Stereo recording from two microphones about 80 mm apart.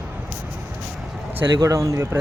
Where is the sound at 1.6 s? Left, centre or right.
Right.